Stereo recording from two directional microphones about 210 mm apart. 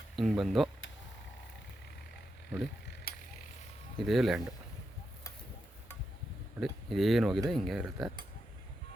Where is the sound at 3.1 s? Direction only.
45° left (ahead or behind).